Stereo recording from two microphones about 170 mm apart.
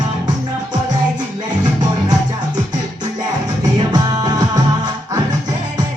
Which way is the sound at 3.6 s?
25° right (ahead or behind).